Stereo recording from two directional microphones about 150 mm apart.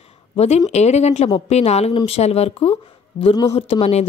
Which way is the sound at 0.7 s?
45° left (ahead or behind).